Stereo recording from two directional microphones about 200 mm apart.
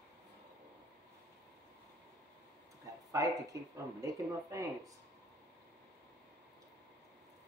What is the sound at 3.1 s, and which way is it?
Speech, 15° right (ahead or behind).